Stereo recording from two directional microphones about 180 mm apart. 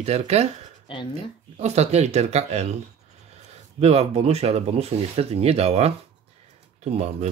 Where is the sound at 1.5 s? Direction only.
35° right (ahead or behind).